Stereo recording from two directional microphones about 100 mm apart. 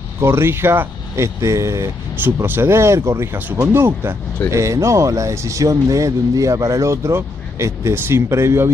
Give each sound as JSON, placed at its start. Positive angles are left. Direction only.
{"t": 0.2, "sound": "speech", "side_deg": -25}
{"t": 2.1, "sound": "speech", "side_deg": -20}
{"t": 3.3, "sound": "speech", "side_deg": -20}